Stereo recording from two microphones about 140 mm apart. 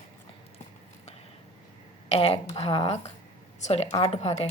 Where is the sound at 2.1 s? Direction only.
45° left (ahead or behind).